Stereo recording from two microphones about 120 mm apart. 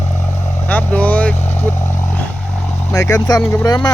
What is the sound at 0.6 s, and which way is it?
Vehicle, 15° left (ahead or behind).